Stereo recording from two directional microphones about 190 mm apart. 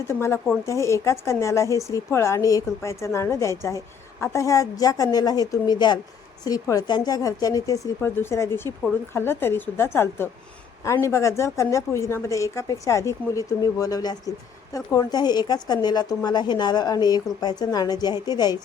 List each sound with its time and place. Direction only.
0.1 s a woman's voice: 15° left (ahead or behind)